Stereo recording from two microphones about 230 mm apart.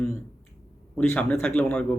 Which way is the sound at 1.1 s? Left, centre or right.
Centre.